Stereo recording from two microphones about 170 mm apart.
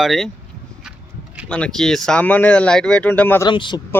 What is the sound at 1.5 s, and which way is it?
Speech, 5° left (ahead or behind).